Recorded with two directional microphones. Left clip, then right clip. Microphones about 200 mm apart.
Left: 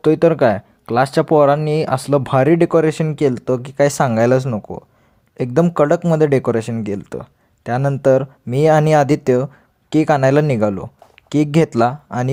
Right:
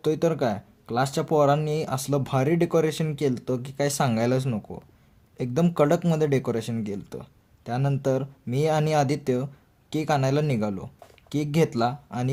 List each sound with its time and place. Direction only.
0.0 s speech: 25° left (ahead or behind)
5.6 s speech: 30° left (ahead or behind)